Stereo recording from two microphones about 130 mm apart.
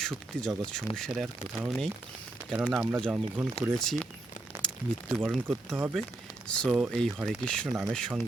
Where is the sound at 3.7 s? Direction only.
5° left (ahead or behind).